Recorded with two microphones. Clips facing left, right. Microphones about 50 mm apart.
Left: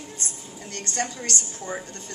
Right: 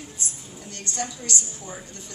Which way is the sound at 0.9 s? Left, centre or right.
Left.